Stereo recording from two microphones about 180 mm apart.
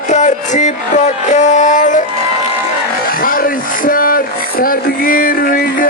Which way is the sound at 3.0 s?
55° left (ahead or behind).